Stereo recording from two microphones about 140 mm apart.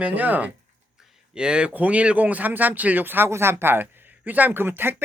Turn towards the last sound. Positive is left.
turn(degrees=-15)  # may be behind; listen again after turning